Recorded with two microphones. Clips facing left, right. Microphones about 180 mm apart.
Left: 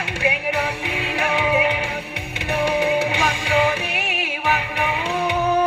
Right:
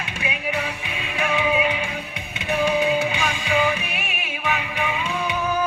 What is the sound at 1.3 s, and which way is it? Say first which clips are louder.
Music: left 1 dB; 60° left (ahead or behind).